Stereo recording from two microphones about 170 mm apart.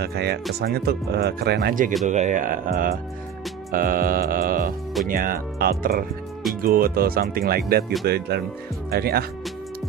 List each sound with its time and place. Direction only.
0.0 s speech: 70° right (ahead or behind)